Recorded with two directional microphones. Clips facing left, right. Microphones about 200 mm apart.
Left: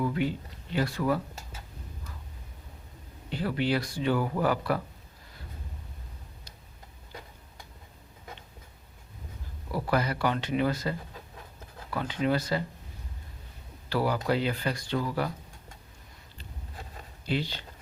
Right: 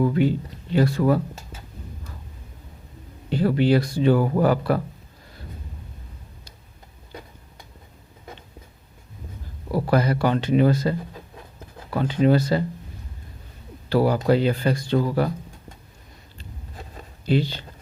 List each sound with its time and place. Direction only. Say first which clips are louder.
0.0 s speech: right 8 dB; 40° right (ahead or behind)
3.3 s speech: right 9 dB; 35° right (ahead or behind)
9.7 s speech: right 7 dB; 35° right (ahead or behind)
13.9 s speech: right 8 dB; 30° right (ahead or behind)
17.2 s speech: right 9 dB; 35° right (ahead or behind)